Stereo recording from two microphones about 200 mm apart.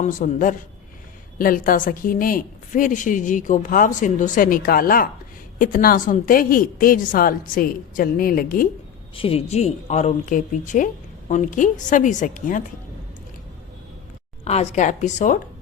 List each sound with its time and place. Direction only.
0.0 s a woman's voice: 40° left (ahead or behind)
9.1 s speech: 30° left (ahead or behind)
14.4 s speech: 35° left (ahead or behind)